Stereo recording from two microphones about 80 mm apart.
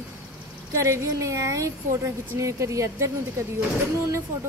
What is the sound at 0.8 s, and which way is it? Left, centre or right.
Speech, right.